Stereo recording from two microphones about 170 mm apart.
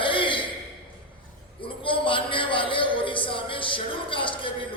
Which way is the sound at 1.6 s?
30° left (ahead or behind).